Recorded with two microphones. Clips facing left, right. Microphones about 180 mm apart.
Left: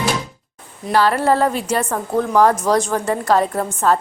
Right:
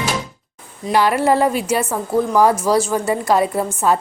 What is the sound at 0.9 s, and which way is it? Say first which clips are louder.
A woman's voice: even; 15° right (ahead or behind).